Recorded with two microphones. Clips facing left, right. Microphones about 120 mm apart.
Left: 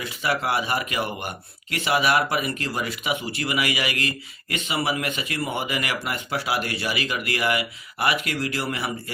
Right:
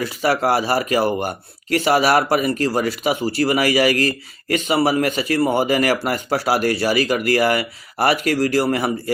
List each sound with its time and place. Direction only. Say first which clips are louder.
0.0 s speech: right 7 dB; 40° right (ahead or behind)